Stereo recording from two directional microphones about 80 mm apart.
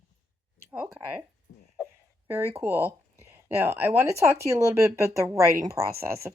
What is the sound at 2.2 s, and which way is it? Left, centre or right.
Speech, right.